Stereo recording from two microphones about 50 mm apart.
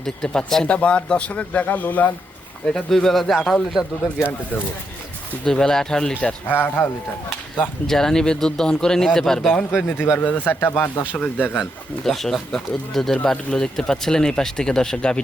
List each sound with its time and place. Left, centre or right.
0.0 s a man's voice: centre; by 2.1 s left
2.6 s speech: centre
5.5 s speech: centre
6.5 s a man's voice: left
7.9 s speech: centre
10.2 s a man's voice: left
12.0 s speech: centre